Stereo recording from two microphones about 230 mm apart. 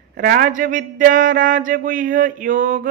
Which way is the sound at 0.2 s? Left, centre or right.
Right.